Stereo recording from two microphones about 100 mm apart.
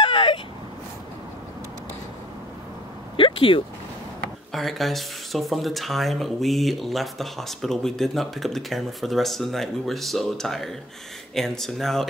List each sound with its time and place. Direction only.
0.0 s a sound: 55° left (ahead or behind)
3.2 s speech: 60° left (ahead or behind)
4.5 s speech: centre (ahead or behind)